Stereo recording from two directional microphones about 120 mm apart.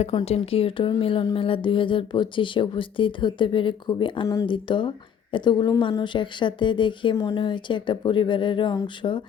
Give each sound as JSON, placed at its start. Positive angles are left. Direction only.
{"t": 0.0, "sound": "speech", "side_deg": 55}